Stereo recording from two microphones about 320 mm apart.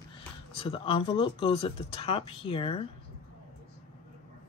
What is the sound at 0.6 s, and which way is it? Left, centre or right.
Speech, centre.